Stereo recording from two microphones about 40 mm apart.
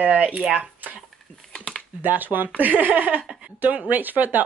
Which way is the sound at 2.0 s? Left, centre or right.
Right.